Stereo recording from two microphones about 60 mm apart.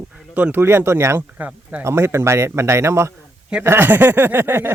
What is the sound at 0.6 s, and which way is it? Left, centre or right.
Speech, right.